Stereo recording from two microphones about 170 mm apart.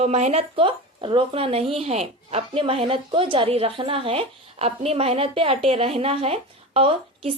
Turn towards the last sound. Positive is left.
turn(degrees=-35)  # may be behind; listen again after turning